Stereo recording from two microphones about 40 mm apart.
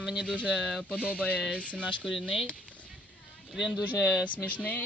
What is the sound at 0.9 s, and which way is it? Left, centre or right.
Speech, left.